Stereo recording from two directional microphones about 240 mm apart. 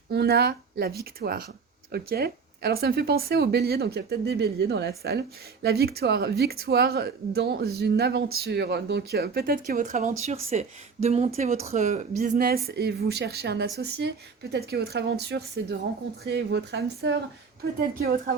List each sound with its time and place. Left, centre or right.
0.1 s a woman's voice: right